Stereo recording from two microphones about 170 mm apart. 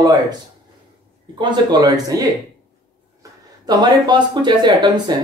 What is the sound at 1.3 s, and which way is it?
Speech, 25° right (ahead or behind).